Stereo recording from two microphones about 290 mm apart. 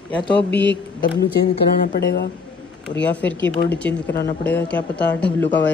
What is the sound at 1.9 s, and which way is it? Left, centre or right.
Speech, left.